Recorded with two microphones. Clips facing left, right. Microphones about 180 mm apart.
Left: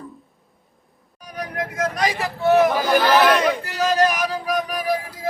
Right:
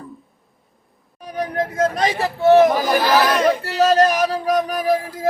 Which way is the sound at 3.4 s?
35° right (ahead or behind).